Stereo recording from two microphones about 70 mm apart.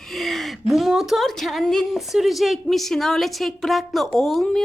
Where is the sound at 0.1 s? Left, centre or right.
Centre.